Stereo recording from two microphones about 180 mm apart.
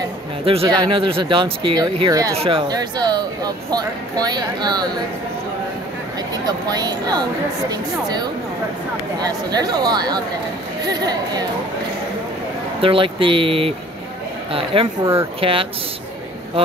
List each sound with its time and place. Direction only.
0.5 s speech: 30° right (ahead or behind)
2.3 s speech: 30° right (ahead or behind)
6.3 s speech: 20° right (ahead or behind)
12.8 s a woman's voice: 30° right (ahead or behind)